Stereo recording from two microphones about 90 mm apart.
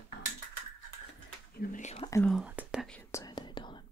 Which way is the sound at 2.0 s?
65° left (ahead or behind).